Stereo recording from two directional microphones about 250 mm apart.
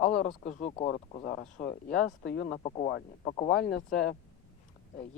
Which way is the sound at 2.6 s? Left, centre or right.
Left.